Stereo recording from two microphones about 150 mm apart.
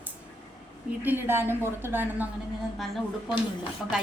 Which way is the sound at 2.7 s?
Centre (ahead or behind).